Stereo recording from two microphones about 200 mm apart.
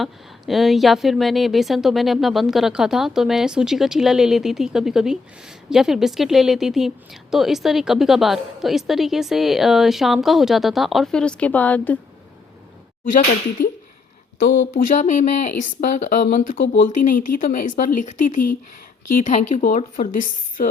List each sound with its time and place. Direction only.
0.0 s a woman's voice: centre (ahead or behind)
14.3 s a woman's voice: 40° left (ahead or behind)